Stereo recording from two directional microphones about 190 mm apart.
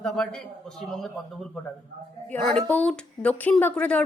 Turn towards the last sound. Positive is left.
turn(degrees=5)  # may be behind; listen again after turning